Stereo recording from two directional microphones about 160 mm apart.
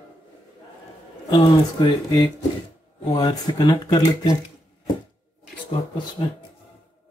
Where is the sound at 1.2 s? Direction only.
30° left (ahead or behind).